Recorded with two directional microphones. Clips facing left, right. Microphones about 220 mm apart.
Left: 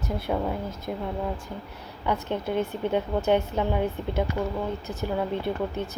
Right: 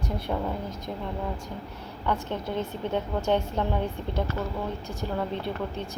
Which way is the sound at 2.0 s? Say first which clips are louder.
Left 2 dB; 10° left (ahead or behind).